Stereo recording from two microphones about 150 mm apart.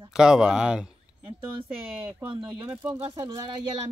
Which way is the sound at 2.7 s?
10° right (ahead or behind).